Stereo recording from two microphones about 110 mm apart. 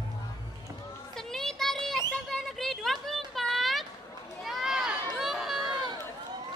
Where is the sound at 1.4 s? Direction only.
5° left (ahead or behind).